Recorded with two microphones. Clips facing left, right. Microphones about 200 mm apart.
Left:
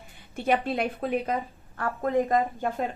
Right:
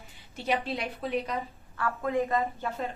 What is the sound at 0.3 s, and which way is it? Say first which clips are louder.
A woman's voice: left 5 dB; 55° left (ahead or behind).